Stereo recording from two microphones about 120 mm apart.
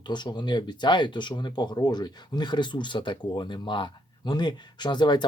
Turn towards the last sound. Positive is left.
turn(degrees=40)  # may be behind; listen again after turning